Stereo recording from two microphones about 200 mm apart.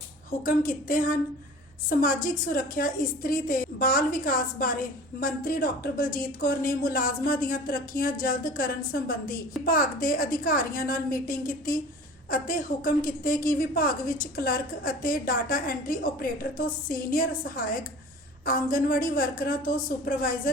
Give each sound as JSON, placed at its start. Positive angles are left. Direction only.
{"t": 0.4, "sound": "speech", "side_deg": 45}